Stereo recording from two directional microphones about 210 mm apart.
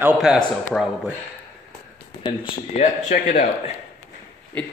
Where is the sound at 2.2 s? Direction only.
35° left (ahead or behind).